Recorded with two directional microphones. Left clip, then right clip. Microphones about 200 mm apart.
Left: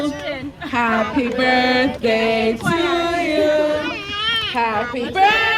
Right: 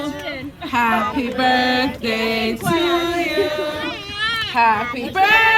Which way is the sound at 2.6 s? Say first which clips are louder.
Even; 55° left (ahead or behind).